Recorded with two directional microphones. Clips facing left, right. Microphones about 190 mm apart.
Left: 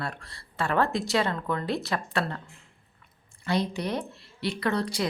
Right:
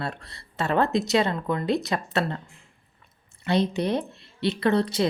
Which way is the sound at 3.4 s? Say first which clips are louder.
Right 4 dB; 25° right (ahead or behind).